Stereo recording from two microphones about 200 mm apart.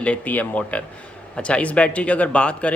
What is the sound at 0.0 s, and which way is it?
Speech, 5° left (ahead or behind).